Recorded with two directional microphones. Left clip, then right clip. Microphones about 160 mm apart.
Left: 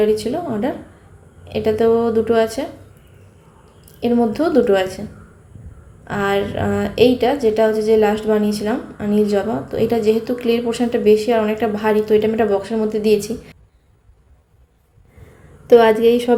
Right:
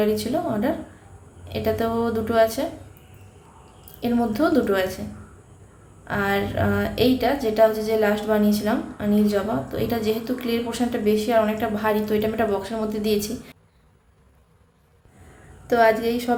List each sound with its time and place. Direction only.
0.0 s a woman's voice: 10° left (ahead or behind)
4.0 s a woman's voice: 15° left (ahead or behind)
6.1 s a woman's voice: 15° left (ahead or behind)
15.6 s a woman's voice: 15° left (ahead or behind)